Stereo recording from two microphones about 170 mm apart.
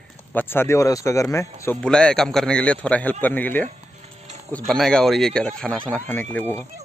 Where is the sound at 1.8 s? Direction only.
5° left (ahead or behind).